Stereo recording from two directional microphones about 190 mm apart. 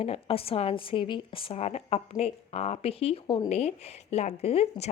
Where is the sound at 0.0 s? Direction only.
30° left (ahead or behind).